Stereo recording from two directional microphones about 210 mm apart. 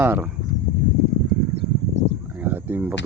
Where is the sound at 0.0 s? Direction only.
10° right (ahead or behind).